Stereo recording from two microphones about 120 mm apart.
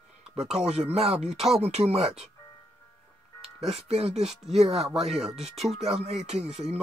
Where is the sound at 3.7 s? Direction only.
60° right (ahead or behind).